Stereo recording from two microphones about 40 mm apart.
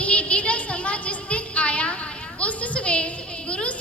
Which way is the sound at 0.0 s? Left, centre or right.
Left.